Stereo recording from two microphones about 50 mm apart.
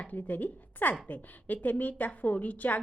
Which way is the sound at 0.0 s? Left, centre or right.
Left.